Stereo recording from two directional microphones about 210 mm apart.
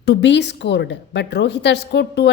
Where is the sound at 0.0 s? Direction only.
55° left (ahead or behind).